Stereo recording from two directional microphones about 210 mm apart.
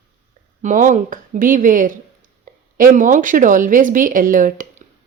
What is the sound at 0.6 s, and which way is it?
Speech, 35° right (ahead or behind).